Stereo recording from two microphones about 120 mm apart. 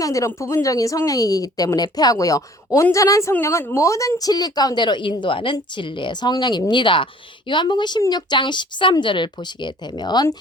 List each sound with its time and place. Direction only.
0.0 s speech: 25° left (ahead or behind)